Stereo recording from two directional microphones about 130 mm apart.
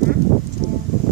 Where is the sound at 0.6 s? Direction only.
60° right (ahead or behind).